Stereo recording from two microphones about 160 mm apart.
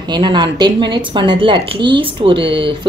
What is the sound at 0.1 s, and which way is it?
Speech, 30° right (ahead or behind).